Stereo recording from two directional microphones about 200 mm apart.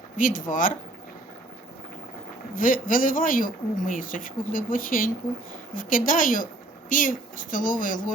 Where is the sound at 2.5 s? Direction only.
45° left (ahead or behind).